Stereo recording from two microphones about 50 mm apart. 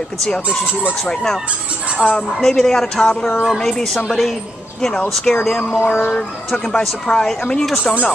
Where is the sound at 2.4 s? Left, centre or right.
Centre.